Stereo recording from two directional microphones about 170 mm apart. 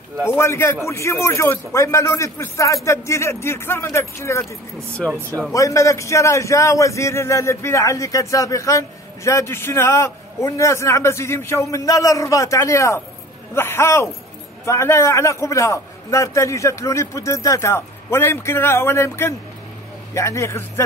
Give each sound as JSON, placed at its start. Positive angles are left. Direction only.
{"t": 0.3, "sound": "a man's voice", "side_deg": 15}
{"t": 5.5, "sound": "a man's voice", "side_deg": 20}